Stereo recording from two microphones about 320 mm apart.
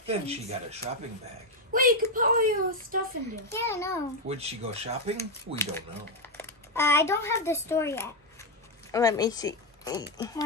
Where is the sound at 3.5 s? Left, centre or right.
Centre.